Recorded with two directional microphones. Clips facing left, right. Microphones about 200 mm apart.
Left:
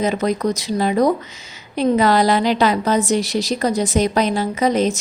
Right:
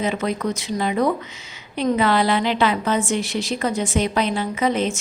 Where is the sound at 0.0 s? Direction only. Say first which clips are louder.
Left 4 dB; 40° left (ahead or behind).